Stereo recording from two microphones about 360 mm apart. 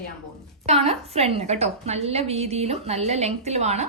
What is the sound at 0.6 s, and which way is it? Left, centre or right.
A woman's voice, centre.